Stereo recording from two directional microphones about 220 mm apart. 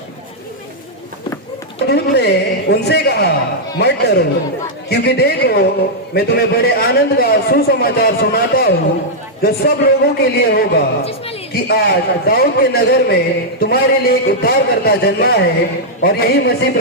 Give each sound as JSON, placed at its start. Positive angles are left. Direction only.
{"t": 1.9, "sound": "a man's voice", "side_deg": 50}